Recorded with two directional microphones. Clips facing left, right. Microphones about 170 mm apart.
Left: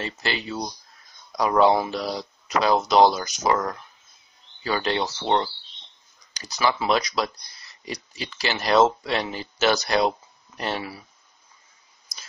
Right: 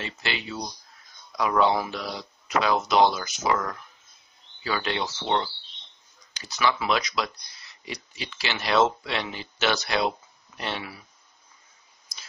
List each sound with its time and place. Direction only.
0.0 s speech: 40° left (ahead or behind)
4.6 s speech: 40° left (ahead or behind)